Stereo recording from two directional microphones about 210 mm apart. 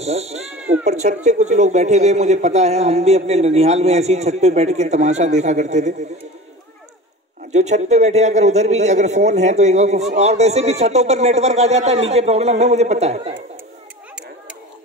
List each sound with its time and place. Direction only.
0.0 s speech: 30° right (ahead or behind)
0.5 s speech: 5° right (ahead or behind)
0.8 s a man's voice: 35° right (ahead or behind)
7.5 s a man's voice: 35° right (ahead or behind)